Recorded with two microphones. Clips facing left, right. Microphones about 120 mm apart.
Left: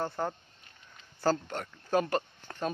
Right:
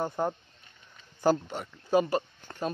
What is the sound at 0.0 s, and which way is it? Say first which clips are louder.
Speech: right 3 dB; 15° right (ahead or behind).